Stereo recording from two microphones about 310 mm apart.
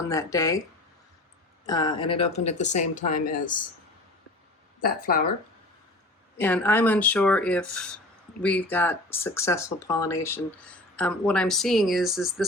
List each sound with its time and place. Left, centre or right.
0.1 s speech: centre
1.6 s speech: centre
4.8 s speech: left
6.3 s speech: centre